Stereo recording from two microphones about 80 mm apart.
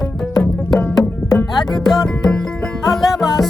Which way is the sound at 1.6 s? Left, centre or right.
Centre.